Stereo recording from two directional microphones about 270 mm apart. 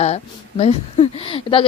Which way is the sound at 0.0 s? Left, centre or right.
Left.